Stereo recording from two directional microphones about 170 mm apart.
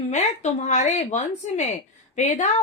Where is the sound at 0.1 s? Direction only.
45° left (ahead or behind).